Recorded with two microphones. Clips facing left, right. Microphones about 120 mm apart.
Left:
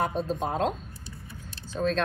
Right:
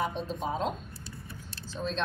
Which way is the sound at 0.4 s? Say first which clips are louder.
Left 2 dB; 55° left (ahead or behind).